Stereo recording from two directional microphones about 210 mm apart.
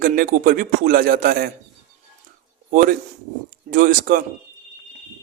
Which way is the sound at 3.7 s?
45° right (ahead or behind).